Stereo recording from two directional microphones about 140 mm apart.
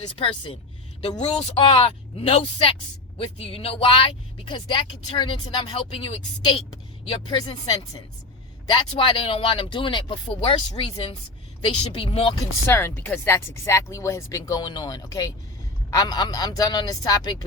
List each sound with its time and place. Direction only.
0.2 s speech: 35° left (ahead or behind)
1.5 s speech: 40° left (ahead or behind)
12.4 s speech: 15° left (ahead or behind)